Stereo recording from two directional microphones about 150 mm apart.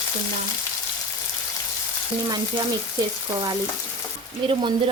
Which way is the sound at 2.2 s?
30° right (ahead or behind).